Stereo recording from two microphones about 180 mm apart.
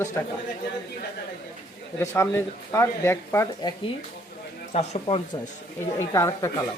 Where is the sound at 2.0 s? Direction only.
15° left (ahead or behind).